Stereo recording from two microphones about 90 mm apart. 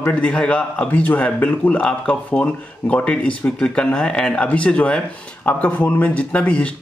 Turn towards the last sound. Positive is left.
turn(degrees=15)  # may be behind; listen again after turning